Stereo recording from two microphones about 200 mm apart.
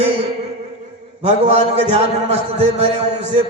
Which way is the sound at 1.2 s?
30° right (ahead or behind).